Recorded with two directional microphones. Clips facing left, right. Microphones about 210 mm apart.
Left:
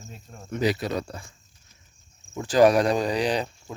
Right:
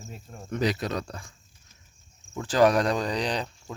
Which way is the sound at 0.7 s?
5° left (ahead or behind).